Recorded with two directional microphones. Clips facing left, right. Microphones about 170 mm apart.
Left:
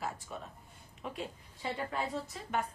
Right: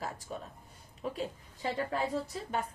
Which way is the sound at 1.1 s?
40° right (ahead or behind).